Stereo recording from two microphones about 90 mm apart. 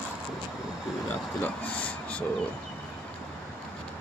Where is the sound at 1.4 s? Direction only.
15° left (ahead or behind).